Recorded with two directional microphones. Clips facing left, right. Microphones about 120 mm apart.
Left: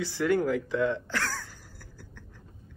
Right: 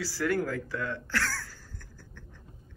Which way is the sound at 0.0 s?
20° left (ahead or behind).